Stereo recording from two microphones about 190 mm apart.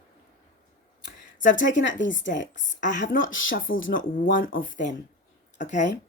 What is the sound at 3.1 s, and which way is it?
Speech, 90° left.